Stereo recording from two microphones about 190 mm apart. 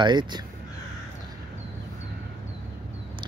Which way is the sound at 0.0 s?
25° right (ahead or behind).